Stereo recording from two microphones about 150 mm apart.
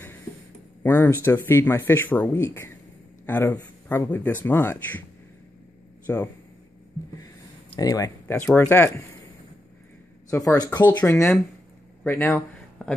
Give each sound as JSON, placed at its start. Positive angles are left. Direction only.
{"t": 0.8, "sound": "speech", "side_deg": 15}
{"t": 6.1, "sound": "speech", "side_deg": 15}
{"t": 7.7, "sound": "speech", "side_deg": 25}
{"t": 10.3, "sound": "speech", "side_deg": 20}
{"t": 10.9, "sound": "speech", "side_deg": 15}